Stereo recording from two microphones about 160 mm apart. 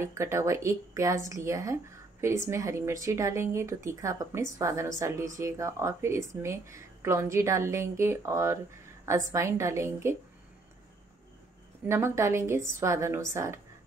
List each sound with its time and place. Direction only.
0.0 s speech: 20° right (ahead or behind)
11.9 s speech: 15° right (ahead or behind)